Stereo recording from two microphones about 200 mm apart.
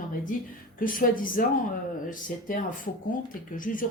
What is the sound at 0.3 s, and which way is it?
A woman's voice, 40° left (ahead or behind).